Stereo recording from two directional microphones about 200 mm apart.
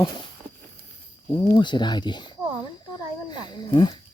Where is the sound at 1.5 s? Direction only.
25° left (ahead or behind).